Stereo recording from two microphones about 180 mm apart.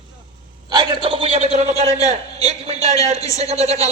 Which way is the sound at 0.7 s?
25° right (ahead or behind).